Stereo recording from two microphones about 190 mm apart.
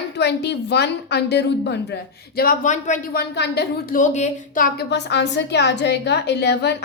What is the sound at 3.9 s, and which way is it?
A woman's voice, 40° left (ahead or behind).